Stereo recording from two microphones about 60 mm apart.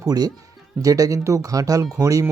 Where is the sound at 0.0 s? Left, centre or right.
Right.